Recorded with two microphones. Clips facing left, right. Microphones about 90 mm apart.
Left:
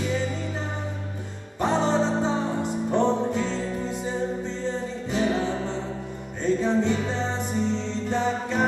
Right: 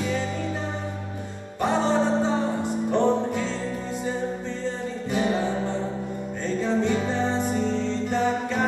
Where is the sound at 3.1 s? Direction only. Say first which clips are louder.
Right 1 dB; 15° right (ahead or behind).